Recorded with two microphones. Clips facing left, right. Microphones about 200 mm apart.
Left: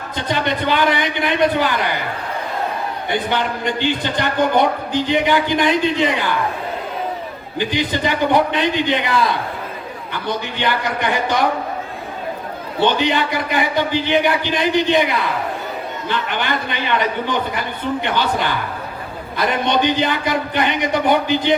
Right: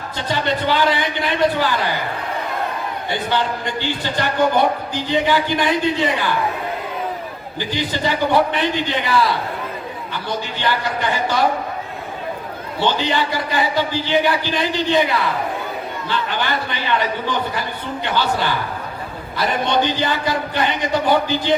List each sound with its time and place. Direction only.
0.3 s a man's voice: 20° left (ahead or behind)
3.1 s a man's voice: 20° left (ahead or behind)
7.6 s a man's voice: 20° left (ahead or behind)
12.8 s a man's voice: 20° left (ahead or behind)